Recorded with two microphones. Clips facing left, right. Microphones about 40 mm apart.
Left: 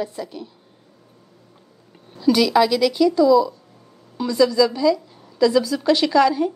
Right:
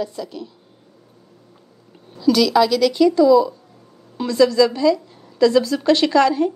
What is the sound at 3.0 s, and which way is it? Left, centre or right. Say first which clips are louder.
A woman's voice: right 2 dB; centre.